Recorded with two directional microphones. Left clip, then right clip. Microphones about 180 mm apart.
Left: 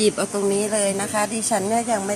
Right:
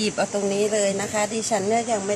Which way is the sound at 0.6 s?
10° left (ahead or behind).